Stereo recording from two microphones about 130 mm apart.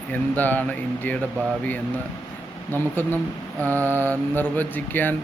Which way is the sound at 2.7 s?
15° left (ahead or behind).